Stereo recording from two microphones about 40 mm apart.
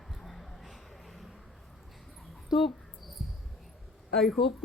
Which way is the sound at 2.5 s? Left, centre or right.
Centre.